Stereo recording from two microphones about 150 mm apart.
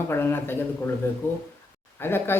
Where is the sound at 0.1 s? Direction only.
15° left (ahead or behind).